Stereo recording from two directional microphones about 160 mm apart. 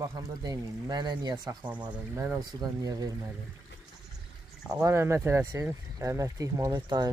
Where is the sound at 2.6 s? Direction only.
20° right (ahead or behind).